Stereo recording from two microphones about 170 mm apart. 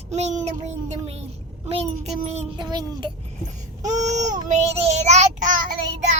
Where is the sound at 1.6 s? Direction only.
35° right (ahead or behind).